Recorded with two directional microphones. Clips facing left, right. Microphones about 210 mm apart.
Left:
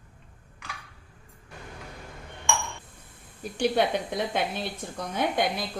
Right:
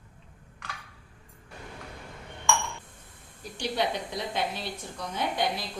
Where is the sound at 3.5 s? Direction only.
55° left (ahead or behind).